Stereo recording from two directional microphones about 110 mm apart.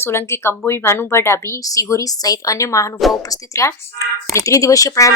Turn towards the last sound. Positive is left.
turn(degrees=30)  # may be behind; listen again after turning